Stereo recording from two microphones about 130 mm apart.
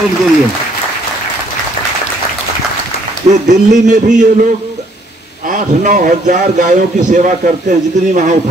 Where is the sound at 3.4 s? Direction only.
70° right (ahead or behind).